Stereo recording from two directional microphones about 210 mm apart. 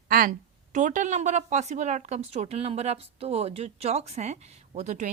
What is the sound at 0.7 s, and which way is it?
Speech, 35° right (ahead or behind).